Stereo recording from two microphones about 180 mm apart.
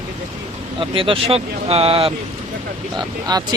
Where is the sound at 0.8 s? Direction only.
30° right (ahead or behind).